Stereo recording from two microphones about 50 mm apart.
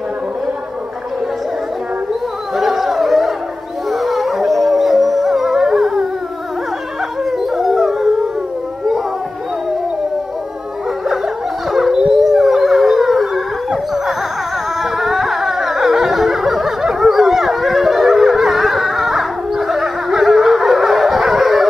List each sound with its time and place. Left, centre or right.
2.5 s a sound: centre
3.9 s howl: centre
7.2 s howl: centre
11.7 s a sound: centre
12.2 s howl: centre
13.7 s dog: centre